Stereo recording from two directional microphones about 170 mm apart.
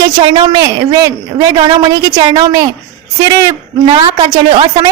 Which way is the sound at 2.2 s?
25° right (ahead or behind).